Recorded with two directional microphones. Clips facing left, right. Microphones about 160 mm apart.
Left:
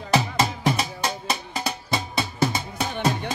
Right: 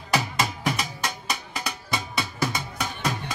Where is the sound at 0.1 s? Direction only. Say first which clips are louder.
Left 4 dB; 25° left (ahead or behind).